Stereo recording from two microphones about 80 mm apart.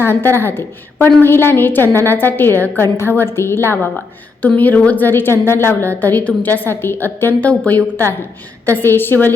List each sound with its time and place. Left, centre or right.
0.0 s a woman's voice: left
4.4 s a woman's voice: centre
8.8 s a woman's voice: left